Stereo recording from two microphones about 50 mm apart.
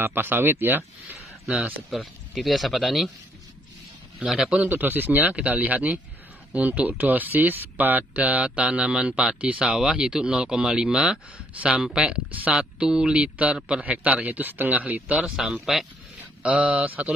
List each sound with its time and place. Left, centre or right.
0.0 s speech: right
1.9 s speech: centre
4.3 s speech: centre
4.6 s speech: right
5.3 s speech: right; by 11.1 s centre
11.3 s speech: right
11.8 s speech: centre
12.3 s speech: right
12.5 s speech: centre
15.6 s speech: centre
16.4 s speech: right